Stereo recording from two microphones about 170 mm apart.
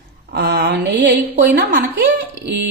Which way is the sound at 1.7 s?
70° right (ahead or behind).